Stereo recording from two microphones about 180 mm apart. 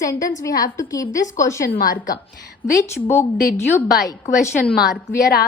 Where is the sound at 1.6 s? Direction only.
55° left (ahead or behind).